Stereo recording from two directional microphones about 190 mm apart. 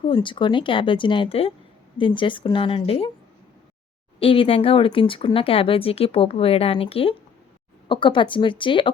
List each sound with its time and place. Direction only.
0.0 s speech: 25° left (ahead or behind)
4.2 s speech: 30° left (ahead or behind)